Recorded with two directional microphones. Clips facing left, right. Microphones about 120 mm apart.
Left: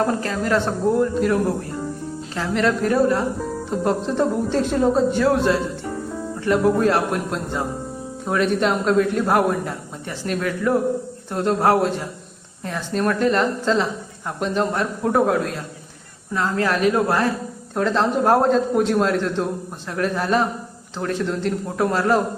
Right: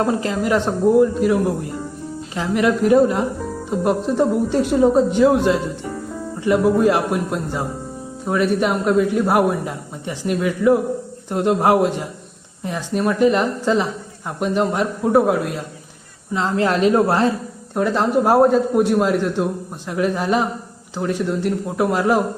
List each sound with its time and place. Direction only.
0.0 s speech: 20° right (ahead or behind)
16.3 s speech: 20° right (ahead or behind)
17.7 s speech: 10° right (ahead or behind)